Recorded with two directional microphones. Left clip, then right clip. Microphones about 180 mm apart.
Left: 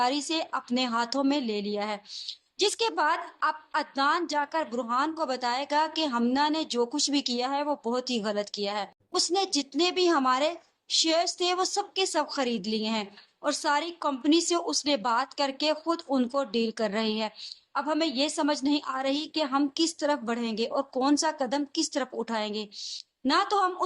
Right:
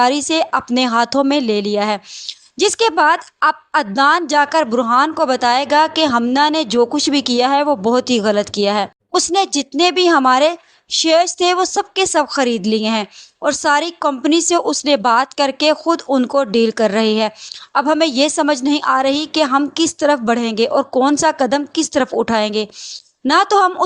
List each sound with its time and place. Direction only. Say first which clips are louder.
0.0 s speech: right 13 dB; 45° right (ahead or behind)